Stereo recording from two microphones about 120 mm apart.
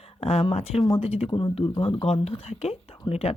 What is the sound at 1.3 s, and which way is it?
Speech, 35° left (ahead or behind).